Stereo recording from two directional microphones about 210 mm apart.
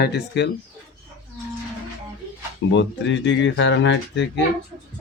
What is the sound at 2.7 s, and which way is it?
Speech, 60° left (ahead or behind).